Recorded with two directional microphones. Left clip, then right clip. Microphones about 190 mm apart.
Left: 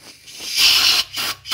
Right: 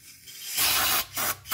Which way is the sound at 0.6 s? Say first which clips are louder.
Left 11 dB; 15° right (ahead or behind).